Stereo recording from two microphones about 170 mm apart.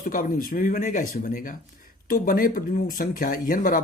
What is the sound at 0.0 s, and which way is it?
Speech, 55° left (ahead or behind).